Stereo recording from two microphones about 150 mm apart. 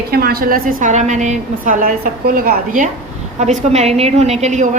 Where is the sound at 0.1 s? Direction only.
90° right; by 2.9 s 70° right (ahead or behind).